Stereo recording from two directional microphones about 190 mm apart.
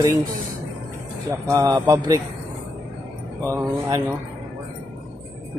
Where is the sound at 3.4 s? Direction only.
15° right (ahead or behind).